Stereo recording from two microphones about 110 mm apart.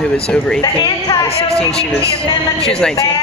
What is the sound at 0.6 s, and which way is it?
Speech, 40° left (ahead or behind).